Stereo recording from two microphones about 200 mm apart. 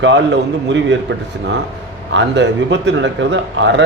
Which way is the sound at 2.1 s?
65° right (ahead or behind).